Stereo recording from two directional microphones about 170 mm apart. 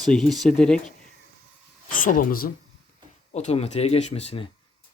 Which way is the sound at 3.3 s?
40° left (ahead or behind).